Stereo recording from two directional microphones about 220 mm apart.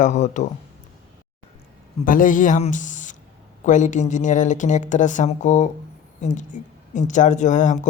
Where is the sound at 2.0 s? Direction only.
40° left (ahead or behind).